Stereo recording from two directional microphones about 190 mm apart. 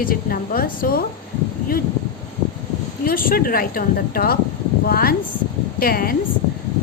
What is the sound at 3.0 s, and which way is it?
A woman's voice, 50° left (ahead or behind).